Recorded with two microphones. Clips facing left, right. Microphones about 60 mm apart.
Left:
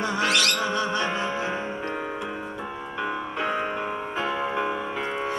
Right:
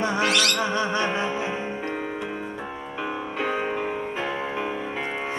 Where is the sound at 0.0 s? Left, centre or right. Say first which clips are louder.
Right 1 dB; right.